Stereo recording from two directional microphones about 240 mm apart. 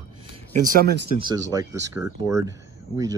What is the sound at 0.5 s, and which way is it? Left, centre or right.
Speech, right.